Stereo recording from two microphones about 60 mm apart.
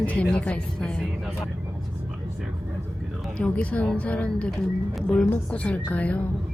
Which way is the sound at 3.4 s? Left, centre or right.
Left.